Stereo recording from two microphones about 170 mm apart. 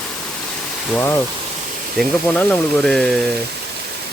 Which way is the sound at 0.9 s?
15° left (ahead or behind).